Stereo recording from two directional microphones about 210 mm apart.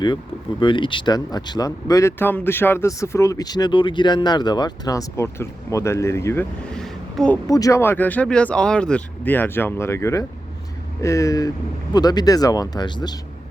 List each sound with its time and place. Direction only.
0.6 s speech: 25° left (ahead or behind); by 7.3 s 5° left (ahead or behind)
7.4 s speech: 15° left (ahead or behind)